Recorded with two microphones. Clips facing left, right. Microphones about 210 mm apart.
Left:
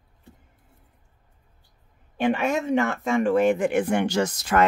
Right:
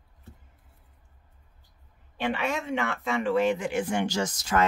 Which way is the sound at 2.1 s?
45° left (ahead or behind).